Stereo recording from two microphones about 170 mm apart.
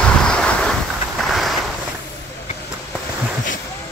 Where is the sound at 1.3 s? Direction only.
Centre (ahead or behind).